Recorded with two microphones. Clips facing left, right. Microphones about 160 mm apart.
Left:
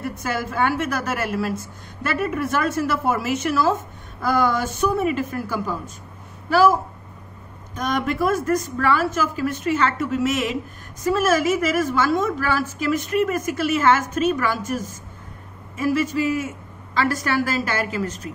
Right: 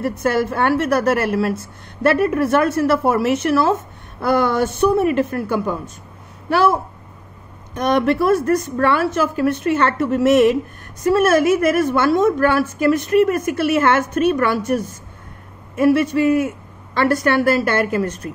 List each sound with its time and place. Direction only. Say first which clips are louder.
0.0 s a woman's voice: right 8 dB; 60° right (ahead or behind)
7.7 s a woman's voice: right 7 dB; 65° right (ahead or behind)